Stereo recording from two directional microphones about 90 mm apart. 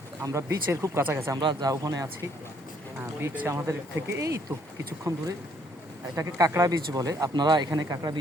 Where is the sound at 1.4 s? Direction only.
60° right (ahead or behind).